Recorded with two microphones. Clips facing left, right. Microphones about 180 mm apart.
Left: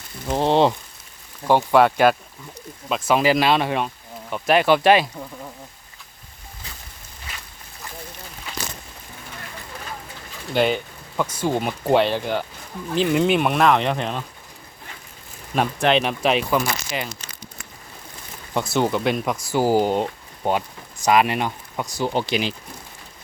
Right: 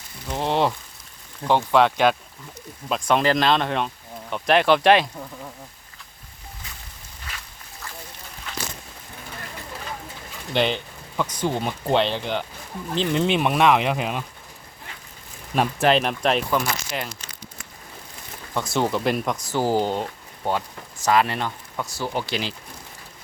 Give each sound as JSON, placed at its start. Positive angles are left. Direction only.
{"t": 0.3, "sound": "rain on surface", "side_deg": 35}
{"t": 1.5, "sound": "speech", "side_deg": 10}
{"t": 10.5, "sound": "speech", "side_deg": 5}
{"t": 15.5, "sound": "speech", "side_deg": 0}
{"t": 18.5, "sound": "speech", "side_deg": 5}